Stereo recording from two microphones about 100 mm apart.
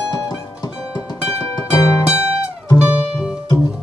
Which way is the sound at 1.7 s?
35° left (ahead or behind).